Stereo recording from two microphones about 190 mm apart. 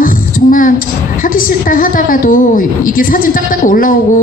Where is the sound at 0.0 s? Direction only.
45° left (ahead or behind).